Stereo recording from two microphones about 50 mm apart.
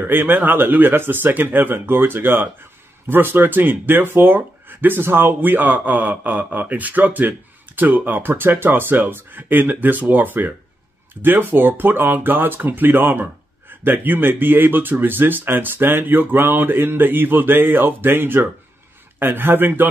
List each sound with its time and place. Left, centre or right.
0.0 s speech: right